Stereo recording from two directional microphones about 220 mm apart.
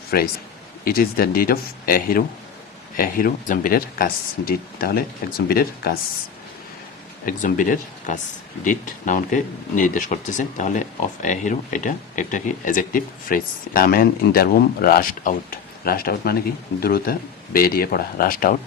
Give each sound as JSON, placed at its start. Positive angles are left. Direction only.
{"t": 0.1, "sound": "speech", "side_deg": 45}
{"t": 7.4, "sound": "speech", "side_deg": 35}